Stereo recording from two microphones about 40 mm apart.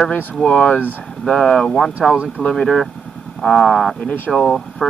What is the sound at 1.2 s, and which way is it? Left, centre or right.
Speech, centre.